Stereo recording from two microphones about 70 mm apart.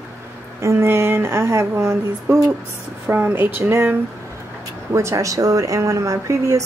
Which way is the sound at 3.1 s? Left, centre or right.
Right.